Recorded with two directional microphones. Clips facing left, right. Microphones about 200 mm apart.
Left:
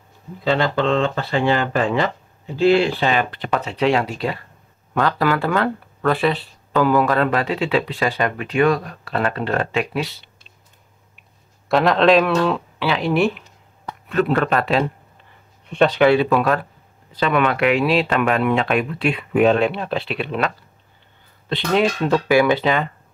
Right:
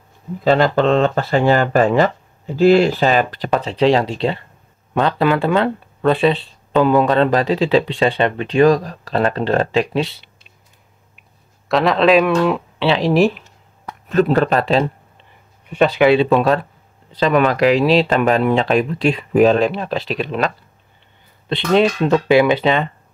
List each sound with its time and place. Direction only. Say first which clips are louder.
0.4 s speech: right 5 dB; 45° right (ahead or behind)
11.7 s speech: right 1 dB; centre (ahead or behind)
12.7 s speech: right 7 dB; 30° right (ahead or behind)
15.6 s speech: right 1 dB; 5° right (ahead or behind)
16.1 s speech: right 3 dB; 25° right (ahead or behind)
21.5 s speech: right 4 dB; 25° right (ahead or behind)